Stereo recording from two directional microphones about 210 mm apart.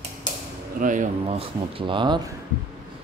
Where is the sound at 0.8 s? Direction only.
35° right (ahead or behind); by 2.3 s 20° right (ahead or behind).